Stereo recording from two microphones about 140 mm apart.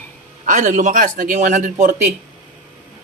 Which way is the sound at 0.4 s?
70° right (ahead or behind).